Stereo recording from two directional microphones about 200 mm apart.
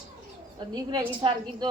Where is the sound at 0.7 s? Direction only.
20° right (ahead or behind).